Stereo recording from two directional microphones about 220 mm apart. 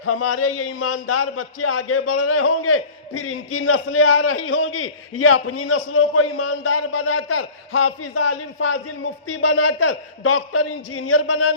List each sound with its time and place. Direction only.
0.0 s a man's voice: 75° left (ahead or behind)